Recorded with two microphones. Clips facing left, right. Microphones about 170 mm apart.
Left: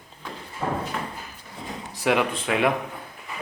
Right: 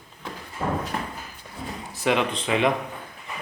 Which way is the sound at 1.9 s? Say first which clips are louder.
Left 1 dB; 10° left (ahead or behind).